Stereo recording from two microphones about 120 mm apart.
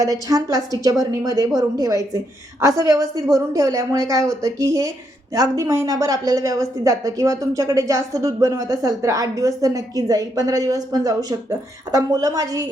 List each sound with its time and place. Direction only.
0.0 s a woman's voice: 30° right (ahead or behind)